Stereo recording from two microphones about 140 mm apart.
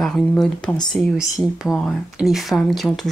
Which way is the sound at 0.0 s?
5° left (ahead or behind).